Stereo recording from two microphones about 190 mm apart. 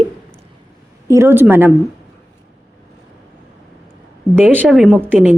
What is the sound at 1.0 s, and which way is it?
Speech, 15° right (ahead or behind).